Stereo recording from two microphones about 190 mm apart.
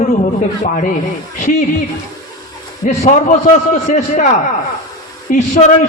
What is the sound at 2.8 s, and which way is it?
A man's voice, 40° left (ahead or behind).